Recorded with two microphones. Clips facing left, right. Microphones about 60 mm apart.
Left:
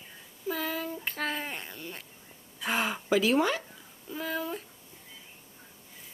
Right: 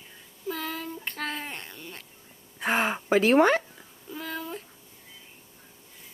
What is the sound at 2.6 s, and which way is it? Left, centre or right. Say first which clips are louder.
Speech: right 4 dB; right.